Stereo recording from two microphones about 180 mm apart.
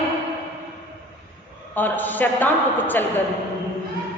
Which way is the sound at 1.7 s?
10° left (ahead or behind).